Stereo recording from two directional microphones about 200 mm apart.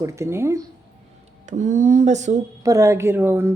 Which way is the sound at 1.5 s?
40° right (ahead or behind).